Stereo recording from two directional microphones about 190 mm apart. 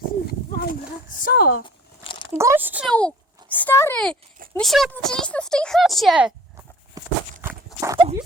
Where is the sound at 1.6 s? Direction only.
25° left (ahead or behind).